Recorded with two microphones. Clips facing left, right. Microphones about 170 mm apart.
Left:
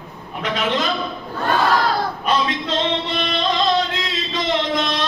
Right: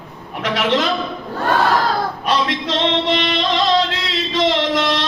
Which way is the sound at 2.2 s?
80° right.